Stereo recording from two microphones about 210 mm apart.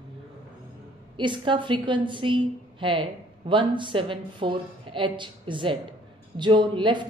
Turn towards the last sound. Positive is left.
turn(degrees=-20)  # may be behind; listen again after turning